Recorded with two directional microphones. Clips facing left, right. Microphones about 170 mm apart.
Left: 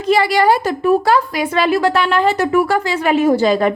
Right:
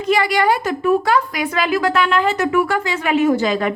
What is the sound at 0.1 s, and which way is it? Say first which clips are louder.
A woman's voice: left 3 dB; 35° left (ahead or behind).